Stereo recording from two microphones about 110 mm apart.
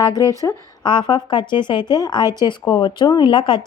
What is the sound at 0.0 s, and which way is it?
Speech, 35° left (ahead or behind).